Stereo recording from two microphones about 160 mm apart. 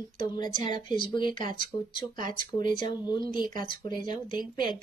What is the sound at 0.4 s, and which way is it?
Speech, 30° left (ahead or behind).